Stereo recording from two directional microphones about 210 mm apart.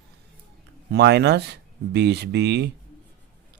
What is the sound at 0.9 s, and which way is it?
A man's voice, 55° right (ahead or behind).